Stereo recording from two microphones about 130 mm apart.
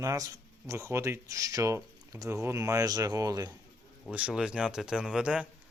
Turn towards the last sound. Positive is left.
turn(degrees=-5)  # may be behind; listen again after turning